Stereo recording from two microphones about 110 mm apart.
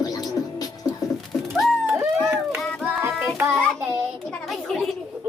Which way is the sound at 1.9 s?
20° right (ahead or behind).